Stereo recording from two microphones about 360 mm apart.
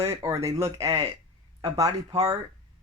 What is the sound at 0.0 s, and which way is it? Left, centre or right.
Speech, centre.